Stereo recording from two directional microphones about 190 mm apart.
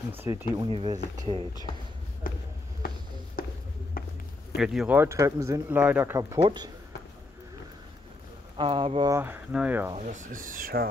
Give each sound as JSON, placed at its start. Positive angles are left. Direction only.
{"t": 0.2, "sound": "speech", "side_deg": -10}
{"t": 0.7, "sound": "speech", "side_deg": -30}
{"t": 2.3, "sound": "basketball bounce", "side_deg": 50}
{"t": 4.0, "sound": "a sound", "side_deg": 50}
{"t": 4.6, "sound": "speech", "side_deg": -5}
{"t": 8.5, "sound": "speech", "side_deg": -25}
{"t": 9.1, "sound": "speech", "side_deg": -10}
{"t": 9.9, "sound": "speech", "side_deg": -40}